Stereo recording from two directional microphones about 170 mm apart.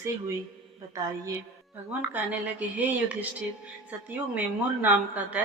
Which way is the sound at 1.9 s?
10° right (ahead or behind).